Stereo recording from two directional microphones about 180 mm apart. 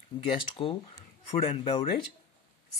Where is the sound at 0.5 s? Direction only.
30° left (ahead or behind).